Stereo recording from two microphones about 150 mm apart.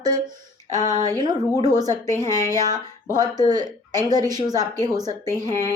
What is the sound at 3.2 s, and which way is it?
A woman's voice, 25° right (ahead or behind).